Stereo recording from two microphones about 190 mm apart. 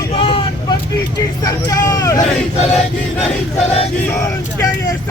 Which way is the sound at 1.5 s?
20° left (ahead or behind).